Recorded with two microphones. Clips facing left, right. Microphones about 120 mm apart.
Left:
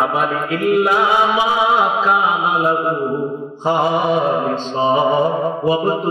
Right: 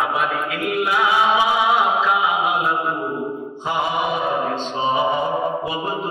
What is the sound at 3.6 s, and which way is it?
Mantra, 35° left (ahead or behind).